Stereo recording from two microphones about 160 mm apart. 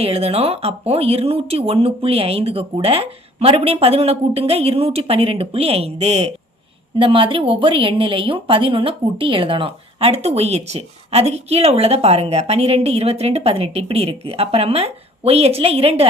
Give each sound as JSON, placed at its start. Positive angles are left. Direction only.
{"t": 0.0, "sound": "a woman's voice", "side_deg": -35}